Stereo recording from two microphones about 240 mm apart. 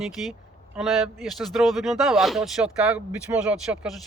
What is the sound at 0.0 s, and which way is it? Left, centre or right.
A man's voice, centre.